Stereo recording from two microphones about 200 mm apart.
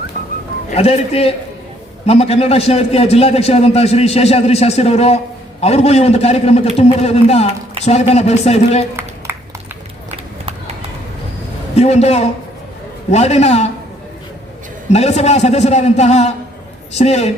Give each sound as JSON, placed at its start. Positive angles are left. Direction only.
{"t": 0.7, "sound": "a man's voice", "side_deg": 30}
{"t": 11.8, "sound": "a man's voice", "side_deg": 30}
{"t": 14.8, "sound": "a man's voice", "side_deg": 35}